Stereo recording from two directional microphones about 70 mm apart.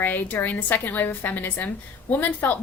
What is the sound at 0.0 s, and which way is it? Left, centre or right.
A woman's voice, left.